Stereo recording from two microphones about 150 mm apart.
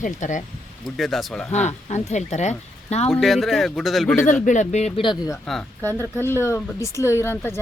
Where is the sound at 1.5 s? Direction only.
50° left (ahead or behind).